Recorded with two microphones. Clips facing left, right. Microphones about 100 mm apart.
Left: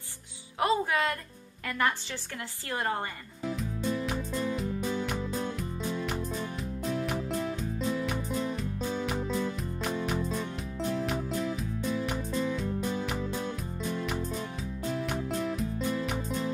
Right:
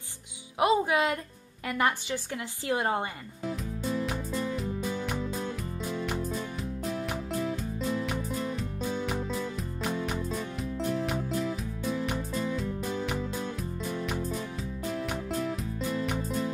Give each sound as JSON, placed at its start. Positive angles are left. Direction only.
{"t": 0.6, "sound": "speech", "side_deg": -15}
{"t": 4.0, "sound": "music", "side_deg": 0}
{"t": 15.0, "sound": "music", "side_deg": 0}